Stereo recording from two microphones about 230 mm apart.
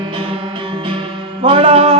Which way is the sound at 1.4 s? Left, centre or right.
Right.